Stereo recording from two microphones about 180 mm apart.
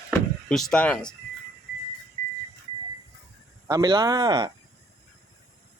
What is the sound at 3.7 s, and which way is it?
Speech, 20° right (ahead or behind).